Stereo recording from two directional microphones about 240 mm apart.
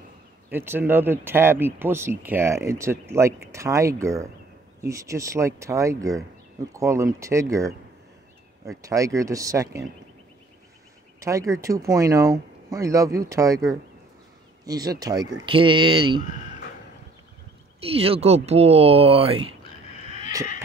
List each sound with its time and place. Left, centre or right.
0.5 s speech: centre
11.1 s speech: centre
17.7 s speech: right
20.0 s a sound: left